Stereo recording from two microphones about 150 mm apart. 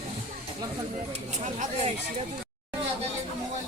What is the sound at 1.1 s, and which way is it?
Chatter, 50° right (ahead or behind).